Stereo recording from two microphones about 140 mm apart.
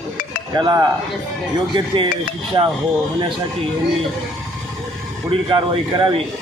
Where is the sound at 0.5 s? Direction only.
30° right (ahead or behind).